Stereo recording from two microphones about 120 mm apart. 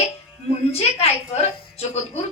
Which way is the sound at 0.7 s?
60° left (ahead or behind).